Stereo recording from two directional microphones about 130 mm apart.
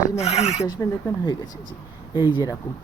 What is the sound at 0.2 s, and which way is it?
Filing, 55° left (ahead or behind).